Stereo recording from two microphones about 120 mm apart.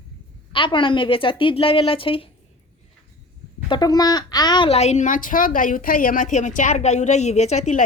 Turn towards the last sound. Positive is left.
turn(degrees=80)